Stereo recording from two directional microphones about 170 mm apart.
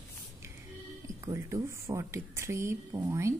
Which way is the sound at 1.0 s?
20° right (ahead or behind).